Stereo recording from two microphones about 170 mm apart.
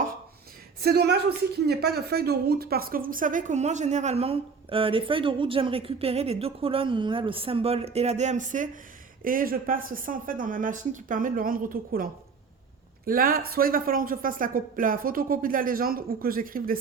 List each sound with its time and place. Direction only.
0.8 s a woman's voice: 70° right (ahead or behind)